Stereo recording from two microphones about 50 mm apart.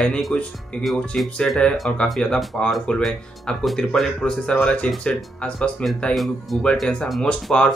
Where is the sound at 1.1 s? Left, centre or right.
Centre.